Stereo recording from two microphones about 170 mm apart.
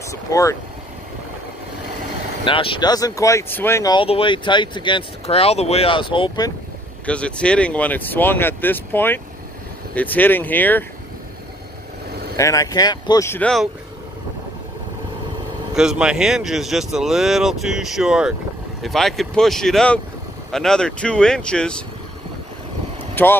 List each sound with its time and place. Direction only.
0.1 s speech: 20° left (ahead or behind)
2.4 s speech: 30° left (ahead or behind); by 3.9 s 15° left (ahead or behind)
3.9 s speech: 30° left (ahead or behind)
7.1 s speech: 5° left (ahead or behind)
12.4 s speech: 20° left (ahead or behind)
15.7 s speech: 5° right (ahead or behind)
23.2 s speech: 10° left (ahead or behind)